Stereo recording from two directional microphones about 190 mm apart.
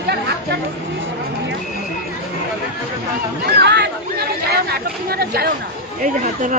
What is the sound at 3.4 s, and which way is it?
Speech, 60° right (ahead or behind).